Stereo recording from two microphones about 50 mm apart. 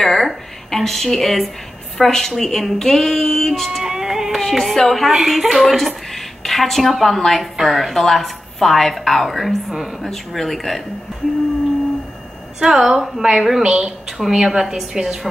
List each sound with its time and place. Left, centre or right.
0.0 s a woman's voice: centre
3.8 s a woman's voice: centre
12.5 s a woman's voice: centre
13.7 s a woman's voice: right
14.1 s a woman's voice: centre